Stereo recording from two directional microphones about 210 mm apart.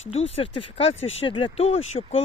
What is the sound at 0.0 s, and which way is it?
Speech, 30° left (ahead or behind).